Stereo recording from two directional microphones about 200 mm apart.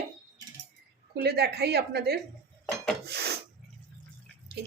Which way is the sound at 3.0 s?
55° right (ahead or behind).